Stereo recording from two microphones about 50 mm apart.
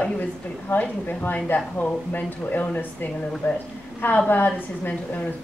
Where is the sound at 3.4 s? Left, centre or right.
Left.